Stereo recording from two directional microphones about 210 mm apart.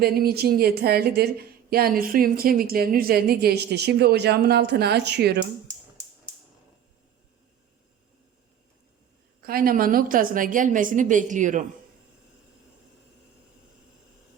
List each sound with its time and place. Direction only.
0.0 s a woman's voice: 45° right (ahead or behind)
9.4 s a woman's voice: 45° right (ahead or behind)